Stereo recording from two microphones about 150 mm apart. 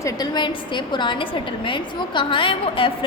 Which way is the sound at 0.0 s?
25° left (ahead or behind).